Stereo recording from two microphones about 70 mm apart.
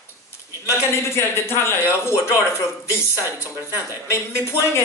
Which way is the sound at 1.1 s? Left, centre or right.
Left.